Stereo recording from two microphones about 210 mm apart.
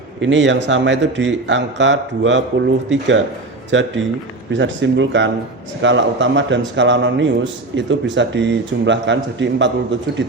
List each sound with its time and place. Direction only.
0.2 s a man's voice: 60° right (ahead or behind)